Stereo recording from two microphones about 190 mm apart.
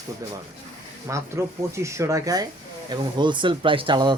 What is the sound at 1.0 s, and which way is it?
Speech, 15° right (ahead or behind).